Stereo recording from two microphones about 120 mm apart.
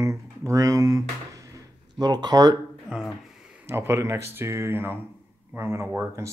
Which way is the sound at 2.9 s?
5° right (ahead or behind).